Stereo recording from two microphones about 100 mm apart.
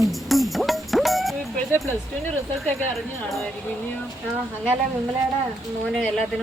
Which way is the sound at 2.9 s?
Centre (ahead or behind).